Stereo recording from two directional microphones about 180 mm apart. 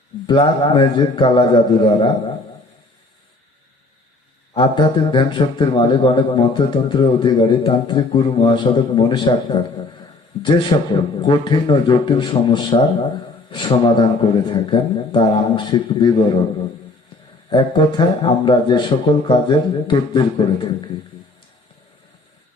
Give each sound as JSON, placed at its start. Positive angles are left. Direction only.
{"t": 0.3, "sound": "a man's voice", "side_deg": 25}
{"t": 4.5, "sound": "a man's voice", "side_deg": 25}
{"t": 17.5, "sound": "a man's voice", "side_deg": 25}